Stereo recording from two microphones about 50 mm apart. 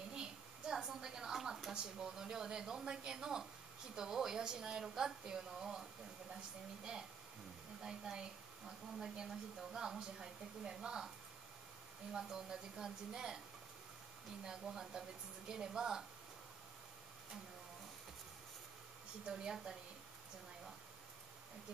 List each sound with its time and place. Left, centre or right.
0.1 s a sound: centre
3.9 s a woman's voice: centre
12.1 s a woman's voice: centre
14.4 s a woman's voice: centre
19.2 s a woman's voice: centre